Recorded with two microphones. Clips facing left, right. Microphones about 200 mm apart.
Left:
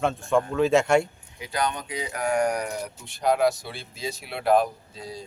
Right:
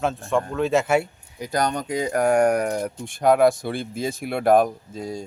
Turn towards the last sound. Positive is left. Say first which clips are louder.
# right 7 dB
turn(degrees=-50)  # may be behind; listen again after turning